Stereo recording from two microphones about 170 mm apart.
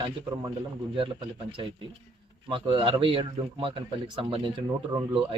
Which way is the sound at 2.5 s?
30° right (ahead or behind).